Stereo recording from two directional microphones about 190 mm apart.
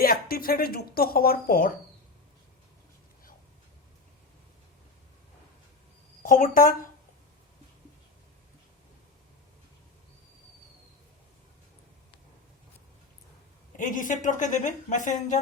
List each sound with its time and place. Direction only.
0.0 s speech: 50° left (ahead or behind)
6.2 s speech: 45° left (ahead or behind)
13.7 s speech: 45° left (ahead or behind)